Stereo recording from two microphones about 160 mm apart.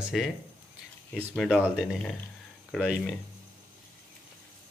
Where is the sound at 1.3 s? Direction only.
5° left (ahead or behind).